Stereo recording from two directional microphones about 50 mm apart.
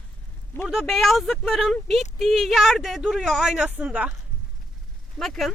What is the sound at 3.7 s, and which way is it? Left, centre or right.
Speech, right.